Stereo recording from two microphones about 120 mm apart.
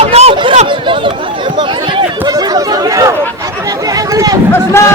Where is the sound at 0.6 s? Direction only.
45° right (ahead or behind).